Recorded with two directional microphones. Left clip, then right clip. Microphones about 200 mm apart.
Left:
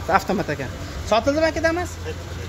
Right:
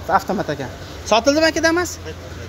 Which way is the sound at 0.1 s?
Centre (ahead or behind).